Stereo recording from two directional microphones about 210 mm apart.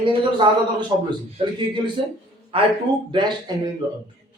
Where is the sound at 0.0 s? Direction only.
25° right (ahead or behind).